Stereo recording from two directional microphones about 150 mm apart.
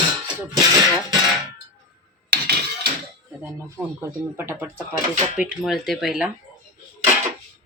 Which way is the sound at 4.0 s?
15° right (ahead or behind).